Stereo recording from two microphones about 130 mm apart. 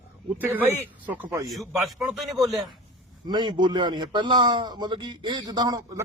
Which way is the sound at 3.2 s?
35° right (ahead or behind).